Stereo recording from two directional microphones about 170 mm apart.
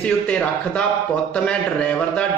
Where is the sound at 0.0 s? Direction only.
5° left (ahead or behind).